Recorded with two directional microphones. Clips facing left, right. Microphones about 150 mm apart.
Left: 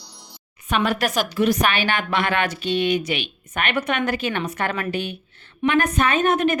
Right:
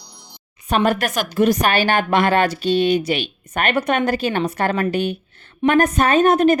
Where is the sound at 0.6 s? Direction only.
40° right (ahead or behind).